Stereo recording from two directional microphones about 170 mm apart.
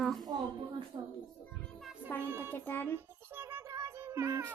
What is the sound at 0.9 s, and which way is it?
Speech, 20° right (ahead or behind).